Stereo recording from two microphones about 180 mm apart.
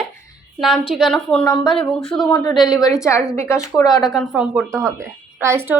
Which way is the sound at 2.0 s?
5° left (ahead or behind).